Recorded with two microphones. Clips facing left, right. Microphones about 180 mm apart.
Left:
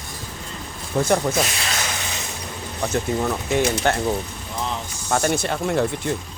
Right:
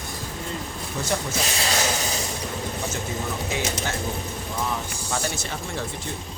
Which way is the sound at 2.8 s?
65° left (ahead or behind).